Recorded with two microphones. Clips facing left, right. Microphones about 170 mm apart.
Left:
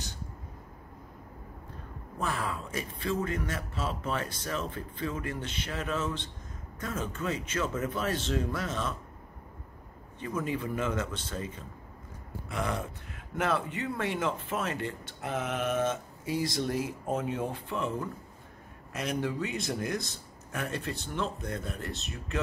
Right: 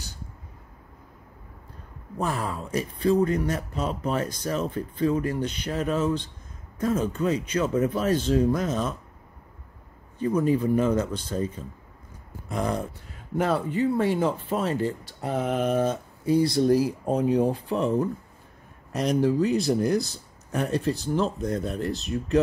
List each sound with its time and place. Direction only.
2.1 s speech: 40° right (ahead or behind)
10.1 s speech: 40° right (ahead or behind)